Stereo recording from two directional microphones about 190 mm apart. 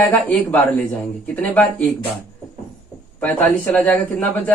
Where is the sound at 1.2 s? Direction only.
5° left (ahead or behind).